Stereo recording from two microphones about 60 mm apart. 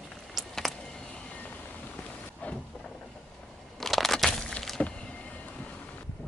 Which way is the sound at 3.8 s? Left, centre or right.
Centre.